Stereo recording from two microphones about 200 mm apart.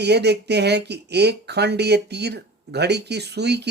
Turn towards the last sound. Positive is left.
turn(degrees=-55)  # may be behind; listen again after turning